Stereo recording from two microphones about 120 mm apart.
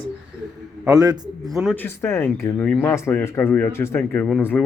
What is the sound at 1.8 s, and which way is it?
A man's voice, 20° left (ahead or behind).